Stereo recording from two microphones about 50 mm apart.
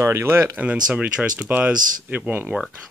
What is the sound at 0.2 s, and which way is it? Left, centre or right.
Speech, right.